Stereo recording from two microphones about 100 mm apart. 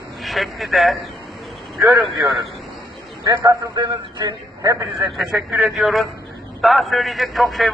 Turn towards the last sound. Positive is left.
turn(degrees=0)  # may be behind; listen again after turning